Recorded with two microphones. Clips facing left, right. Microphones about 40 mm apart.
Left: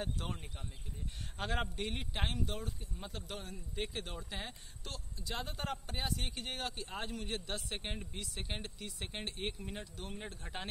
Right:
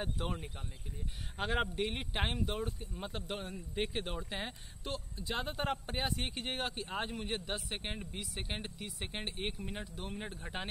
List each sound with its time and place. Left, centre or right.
0.0 s speech: centre